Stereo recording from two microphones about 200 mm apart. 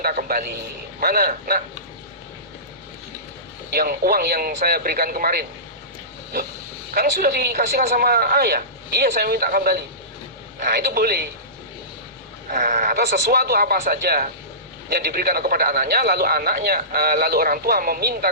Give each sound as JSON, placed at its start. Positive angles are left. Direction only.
{"t": 0.0, "sound": "speech", "side_deg": -45}
{"t": 3.7, "sound": "speech", "side_deg": -50}
{"t": 6.9, "sound": "speech", "side_deg": -50}
{"t": 12.5, "sound": "speech", "side_deg": -40}